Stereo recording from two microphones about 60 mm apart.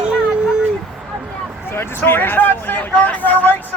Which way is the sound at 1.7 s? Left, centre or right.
Left.